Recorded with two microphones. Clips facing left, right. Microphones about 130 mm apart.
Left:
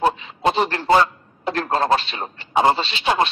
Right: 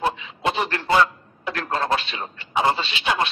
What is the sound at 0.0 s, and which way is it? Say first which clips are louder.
A man's voice: left 4 dB; 40° left (ahead or behind).